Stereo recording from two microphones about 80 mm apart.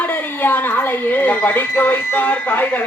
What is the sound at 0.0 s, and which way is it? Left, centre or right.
Speech, left.